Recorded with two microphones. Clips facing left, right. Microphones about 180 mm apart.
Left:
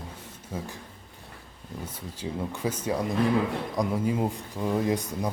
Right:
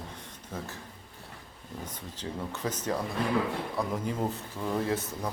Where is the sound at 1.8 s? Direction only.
10° left (ahead or behind).